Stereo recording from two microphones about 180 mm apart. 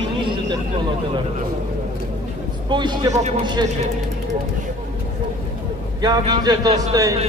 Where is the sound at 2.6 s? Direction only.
25° right (ahead or behind).